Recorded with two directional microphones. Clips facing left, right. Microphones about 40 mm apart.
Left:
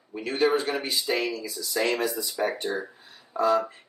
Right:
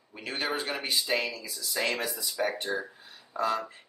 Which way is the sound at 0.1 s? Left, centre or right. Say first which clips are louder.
Left 8 dB; centre.